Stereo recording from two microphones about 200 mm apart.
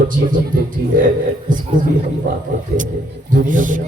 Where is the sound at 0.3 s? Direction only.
45° right (ahead or behind).